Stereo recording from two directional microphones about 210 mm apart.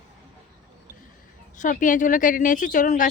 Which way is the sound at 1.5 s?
40° left (ahead or behind).